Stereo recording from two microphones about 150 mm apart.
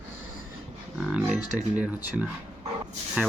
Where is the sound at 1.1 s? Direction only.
5° right (ahead or behind).